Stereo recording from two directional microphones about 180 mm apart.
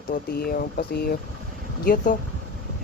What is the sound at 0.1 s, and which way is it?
Speech, 60° left (ahead or behind).